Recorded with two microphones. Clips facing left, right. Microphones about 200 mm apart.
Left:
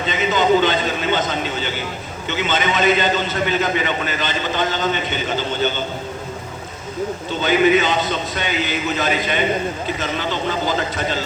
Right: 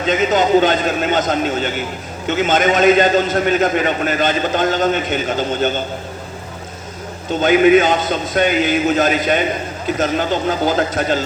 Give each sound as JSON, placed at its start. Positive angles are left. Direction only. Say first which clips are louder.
{"t": 0.0, "sound": "a man's voice", "louder": "right 4 dB", "side_deg": -45}
{"t": 7.4, "sound": "a man's voice", "louder": "right 5 dB", "side_deg": -50}